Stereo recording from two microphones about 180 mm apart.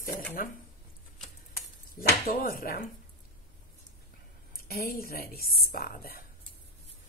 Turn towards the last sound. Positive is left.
turn(degrees=55)  # may be behind; listen again after turning